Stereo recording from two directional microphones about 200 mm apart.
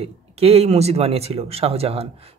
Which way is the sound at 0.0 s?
30° right (ahead or behind).